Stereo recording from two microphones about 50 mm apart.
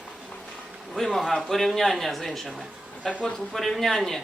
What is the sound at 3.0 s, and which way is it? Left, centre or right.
Speech, centre.